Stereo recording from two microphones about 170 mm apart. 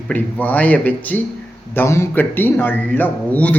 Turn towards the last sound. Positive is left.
turn(degrees=10)  # may be behind; listen again after turning